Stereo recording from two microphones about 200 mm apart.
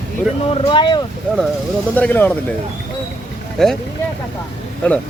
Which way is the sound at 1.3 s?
5° left (ahead or behind).